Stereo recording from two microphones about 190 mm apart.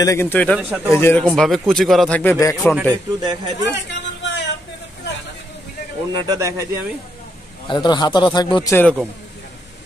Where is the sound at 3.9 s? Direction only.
70° left (ahead or behind).